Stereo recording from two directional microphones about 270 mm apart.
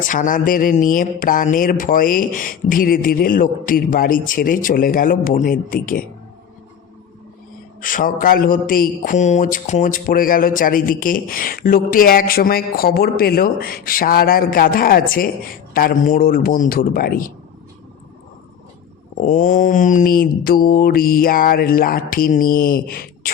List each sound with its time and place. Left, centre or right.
0.1 s a man's voice: left
7.8 s a man's voice: left
19.2 s a man's voice: left